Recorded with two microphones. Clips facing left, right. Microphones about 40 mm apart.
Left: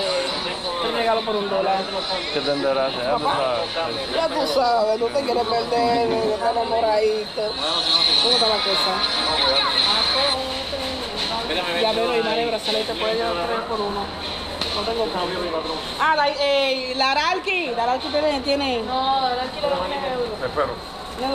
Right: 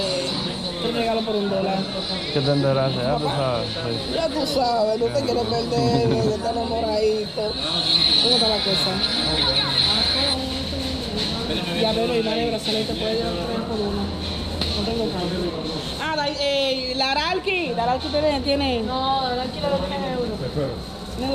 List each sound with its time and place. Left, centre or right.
0.8 s speech: left
4.2 s speech: centre
8.2 s speech: centre
11.5 s speech: left
14.9 s speech: left
16.0 s speech: centre